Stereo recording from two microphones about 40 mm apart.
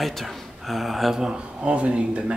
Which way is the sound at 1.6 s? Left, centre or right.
Right.